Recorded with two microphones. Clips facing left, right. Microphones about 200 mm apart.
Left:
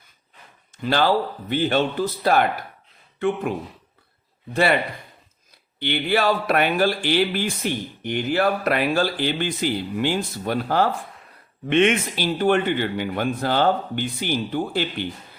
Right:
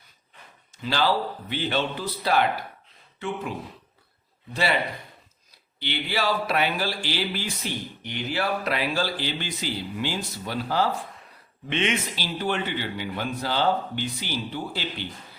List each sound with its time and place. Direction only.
0.8 s speech: 50° left (ahead or behind)
5.8 s speech: 55° left (ahead or behind)